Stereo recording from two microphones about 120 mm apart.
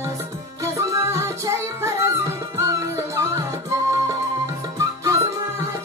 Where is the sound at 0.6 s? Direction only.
25° right (ahead or behind).